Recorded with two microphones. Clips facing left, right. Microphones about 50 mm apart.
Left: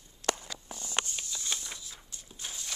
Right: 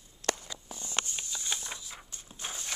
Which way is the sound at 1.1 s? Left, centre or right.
Centre.